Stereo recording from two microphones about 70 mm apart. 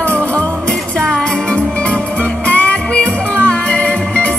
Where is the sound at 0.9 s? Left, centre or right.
Centre.